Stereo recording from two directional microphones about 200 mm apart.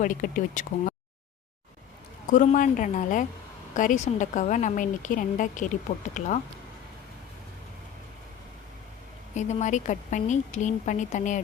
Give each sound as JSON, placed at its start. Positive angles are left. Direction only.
{"t": 0.0, "sound": "speech", "side_deg": 40}
{"t": 2.3, "sound": "speech", "side_deg": 40}
{"t": 9.3, "sound": "speech", "side_deg": 35}